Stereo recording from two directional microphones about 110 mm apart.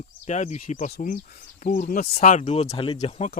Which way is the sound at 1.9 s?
90° left.